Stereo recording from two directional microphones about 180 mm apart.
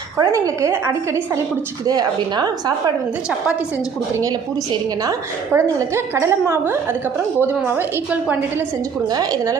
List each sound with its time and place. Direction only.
0.2 s a woman's voice: 20° right (ahead or behind)
5.5 s a woman's voice: 15° right (ahead or behind)
9.0 s a woman's voice: 20° right (ahead or behind)